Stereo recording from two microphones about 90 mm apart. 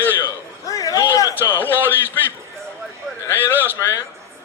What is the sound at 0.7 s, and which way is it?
Speech, 40° left (ahead or behind).